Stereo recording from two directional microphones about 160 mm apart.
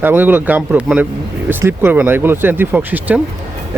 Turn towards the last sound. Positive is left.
turn(degrees=-10)  # may be behind; listen again after turning